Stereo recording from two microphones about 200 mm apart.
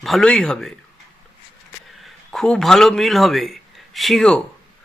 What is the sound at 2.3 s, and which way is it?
A man's voice, centre (ahead or behind).